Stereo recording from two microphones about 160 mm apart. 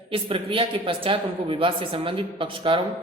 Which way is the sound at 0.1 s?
35° right (ahead or behind).